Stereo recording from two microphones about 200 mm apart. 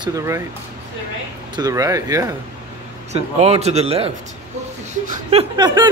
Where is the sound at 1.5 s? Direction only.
20° right (ahead or behind).